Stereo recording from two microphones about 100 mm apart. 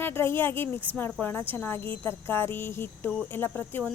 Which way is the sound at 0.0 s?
25° left (ahead or behind).